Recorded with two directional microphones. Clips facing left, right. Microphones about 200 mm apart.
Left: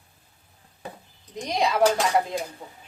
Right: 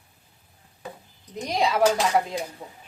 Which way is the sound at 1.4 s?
5° right (ahead or behind).